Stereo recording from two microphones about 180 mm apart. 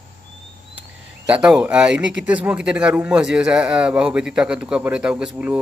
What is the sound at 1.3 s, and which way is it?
Speech, 5° right (ahead or behind).